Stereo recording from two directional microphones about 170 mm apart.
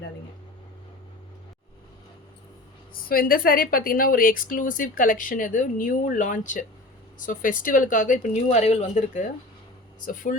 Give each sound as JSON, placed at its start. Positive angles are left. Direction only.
{"t": 2.9, "sound": "a woman's voice", "side_deg": 60}